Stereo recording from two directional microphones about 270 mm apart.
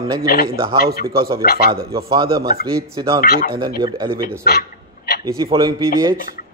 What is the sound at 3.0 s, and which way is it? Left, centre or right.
Speech, centre.